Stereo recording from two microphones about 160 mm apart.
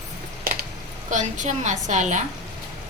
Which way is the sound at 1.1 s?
50° right (ahead or behind).